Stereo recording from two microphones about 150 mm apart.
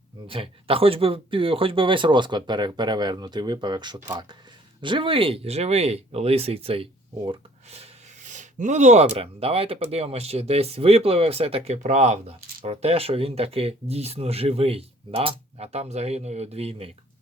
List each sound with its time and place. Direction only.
0.3 s speech: 40° right (ahead or behind)
7.7 s a sound: 50° right (ahead or behind)
9.1 s speech: 40° right (ahead or behind)